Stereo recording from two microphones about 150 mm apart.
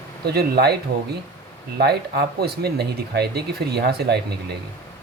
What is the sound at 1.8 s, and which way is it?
Speech, 90° right.